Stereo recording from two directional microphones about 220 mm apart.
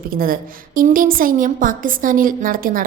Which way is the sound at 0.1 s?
40° right (ahead or behind).